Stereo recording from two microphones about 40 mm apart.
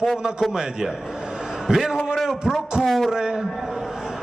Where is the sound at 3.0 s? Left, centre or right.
Centre.